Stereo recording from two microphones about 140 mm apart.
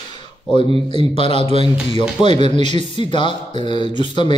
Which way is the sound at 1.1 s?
40° left (ahead or behind).